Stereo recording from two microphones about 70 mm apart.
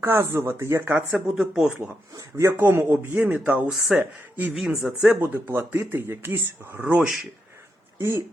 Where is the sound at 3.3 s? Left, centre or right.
Right.